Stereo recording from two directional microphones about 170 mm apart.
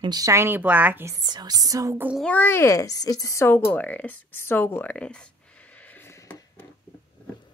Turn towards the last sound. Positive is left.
turn(degrees=15)  # may be behind; listen again after turning